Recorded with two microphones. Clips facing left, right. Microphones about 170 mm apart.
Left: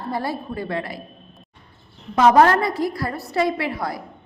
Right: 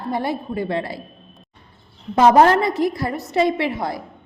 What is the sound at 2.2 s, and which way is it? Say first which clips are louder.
A woman's voice: right 2 dB; 25° right (ahead or behind).